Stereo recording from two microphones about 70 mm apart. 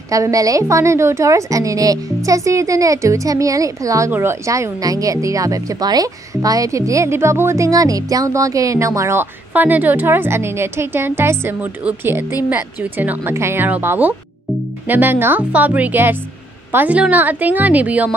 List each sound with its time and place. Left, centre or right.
0.1 s speech: right
4.1 s a woman's voice: right
4.5 s speech: right
9.5 s a woman's voice: right
13.3 s a woman's voice: right
13.7 s speech: right